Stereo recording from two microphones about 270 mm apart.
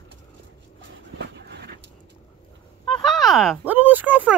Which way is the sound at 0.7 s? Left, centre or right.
Right.